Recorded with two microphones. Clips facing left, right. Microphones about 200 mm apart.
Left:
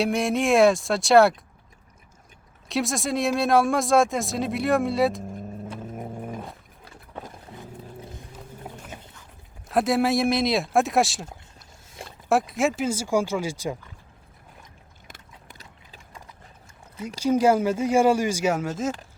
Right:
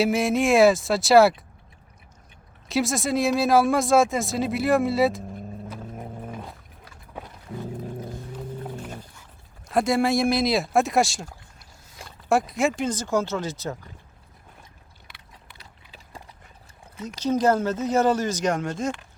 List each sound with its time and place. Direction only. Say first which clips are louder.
0.0 s speech: right 2 dB; centre (ahead or behind)
2.6 s speech: right 2 dB; centre (ahead or behind)
6.0 s dog: left 2 dB; 10° left (ahead or behind)
9.6 s speech: even; centre (ahead or behind)
12.3 s speech: even; centre (ahead or behind)
15.0 s clip-clop: left 4 dB; 45° left (ahead or behind)
17.2 s speech: left 2 dB; 10° left (ahead or behind)